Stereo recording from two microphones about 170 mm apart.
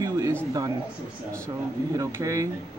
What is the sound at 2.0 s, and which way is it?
Speech, 20° right (ahead or behind).